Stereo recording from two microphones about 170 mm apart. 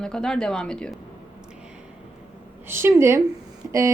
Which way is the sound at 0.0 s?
5° left (ahead or behind).